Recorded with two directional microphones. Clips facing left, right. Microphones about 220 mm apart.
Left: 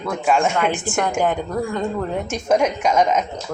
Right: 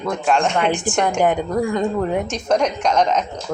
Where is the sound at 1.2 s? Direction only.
15° right (ahead or behind).